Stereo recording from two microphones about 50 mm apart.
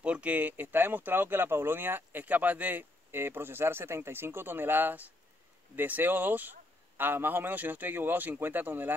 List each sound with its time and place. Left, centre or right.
0.0 s a man's voice: right